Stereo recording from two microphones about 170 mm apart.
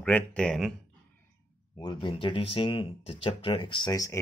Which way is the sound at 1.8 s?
25° left (ahead or behind).